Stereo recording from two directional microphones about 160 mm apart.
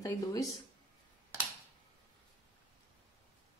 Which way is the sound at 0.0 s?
20° left (ahead or behind).